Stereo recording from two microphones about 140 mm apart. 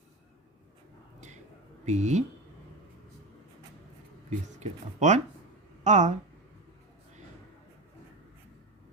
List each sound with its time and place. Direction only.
1.8 s speech: 55° right (ahead or behind)
4.3 s speech: 55° right (ahead or behind)